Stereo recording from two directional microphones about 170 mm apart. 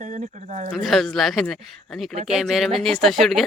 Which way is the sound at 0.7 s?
Centre (ahead or behind).